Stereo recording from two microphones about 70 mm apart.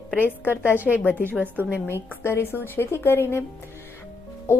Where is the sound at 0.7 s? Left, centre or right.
Right.